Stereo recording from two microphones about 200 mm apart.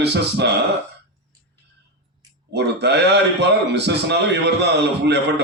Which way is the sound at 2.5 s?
55° right (ahead or behind).